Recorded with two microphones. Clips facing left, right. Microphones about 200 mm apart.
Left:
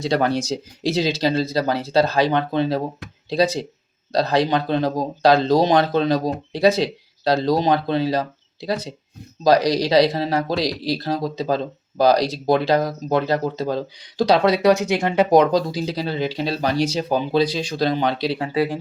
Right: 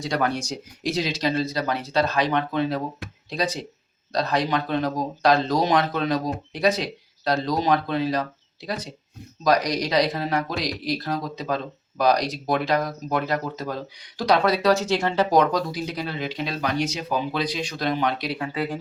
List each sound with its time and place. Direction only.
0.0 s speech: 30° left (ahead or behind)